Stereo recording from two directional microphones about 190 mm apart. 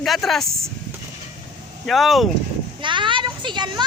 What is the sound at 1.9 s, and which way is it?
Speech, centre (ahead or behind).